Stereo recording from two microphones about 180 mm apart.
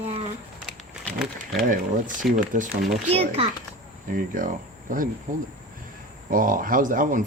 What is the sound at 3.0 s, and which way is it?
Speech, 35° right (ahead or behind).